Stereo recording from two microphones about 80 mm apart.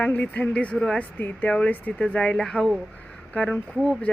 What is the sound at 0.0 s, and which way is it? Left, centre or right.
Speech, left.